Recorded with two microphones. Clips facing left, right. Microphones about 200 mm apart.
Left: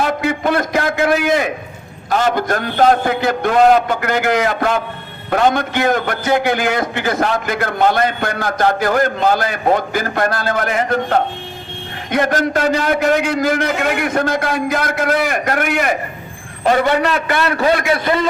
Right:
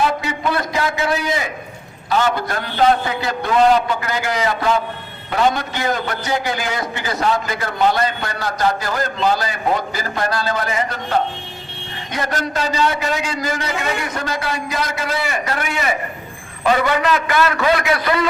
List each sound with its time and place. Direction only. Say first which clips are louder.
0.0 s a man's voice: left 3 dB; 50° left (ahead or behind)
2.0 s a man's voice: left 3 dB; 45° left (ahead or behind)
16.8 s a man's voice: left 2 dB; 35° left (ahead or behind)